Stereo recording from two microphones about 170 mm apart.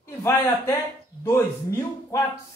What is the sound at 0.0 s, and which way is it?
Speech, 15° left (ahead or behind).